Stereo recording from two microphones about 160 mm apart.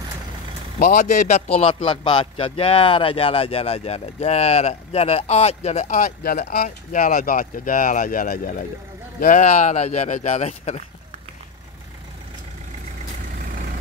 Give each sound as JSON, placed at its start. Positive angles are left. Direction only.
{"t": 0.7, "sound": "a man's voice", "side_deg": 50}